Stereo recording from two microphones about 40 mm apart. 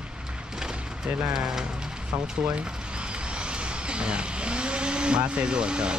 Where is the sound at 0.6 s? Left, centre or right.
Centre.